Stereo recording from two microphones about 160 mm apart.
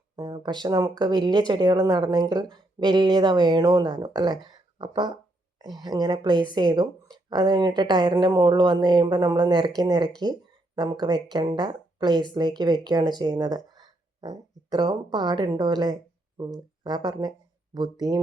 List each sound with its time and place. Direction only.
0.2 s speech: 25° right (ahead or behind)